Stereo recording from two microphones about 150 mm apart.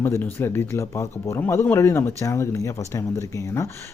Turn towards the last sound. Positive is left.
turn(degrees=20)  # may be behind; listen again after turning